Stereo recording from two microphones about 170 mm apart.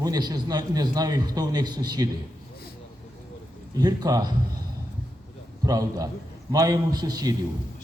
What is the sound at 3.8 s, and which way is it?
Speech, 20° right (ahead or behind).